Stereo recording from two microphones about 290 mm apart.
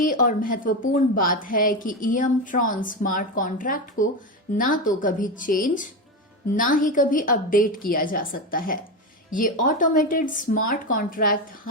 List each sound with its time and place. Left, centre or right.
0.0 s a woman's voice: left